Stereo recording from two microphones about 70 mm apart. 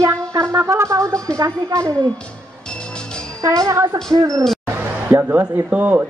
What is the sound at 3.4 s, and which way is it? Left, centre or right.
A woman's voice, right.